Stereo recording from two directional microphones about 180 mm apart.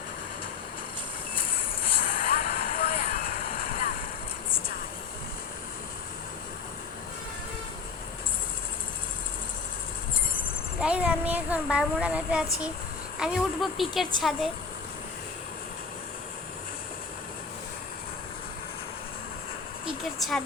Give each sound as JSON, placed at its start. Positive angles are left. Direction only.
{"t": 2.0, "sound": "vehicle", "side_deg": 55}
{"t": 10.8, "sound": "a child's voice", "side_deg": -5}
{"t": 20.1, "sound": "speech", "side_deg": 0}